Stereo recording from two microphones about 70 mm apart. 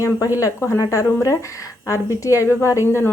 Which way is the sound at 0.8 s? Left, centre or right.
Left.